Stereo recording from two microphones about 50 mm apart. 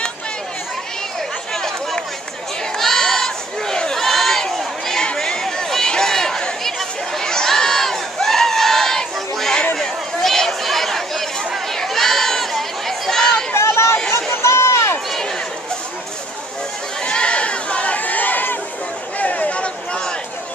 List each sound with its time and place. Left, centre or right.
1.5 s run: centre
2.8 s crowd: centre
5.0 s a sound: centre
9.8 s chatter: centre
13.6 s chatter: left
14.4 s run: left
17.0 s chatter: left
19.1 s a sound: left